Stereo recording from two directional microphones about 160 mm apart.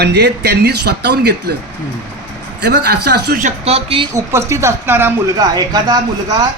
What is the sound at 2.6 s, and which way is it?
Speech, 90° right.